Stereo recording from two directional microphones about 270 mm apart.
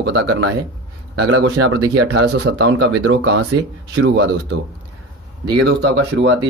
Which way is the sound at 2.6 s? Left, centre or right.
Right.